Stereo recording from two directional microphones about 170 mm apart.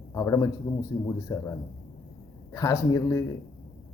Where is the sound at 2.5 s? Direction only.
20° left (ahead or behind).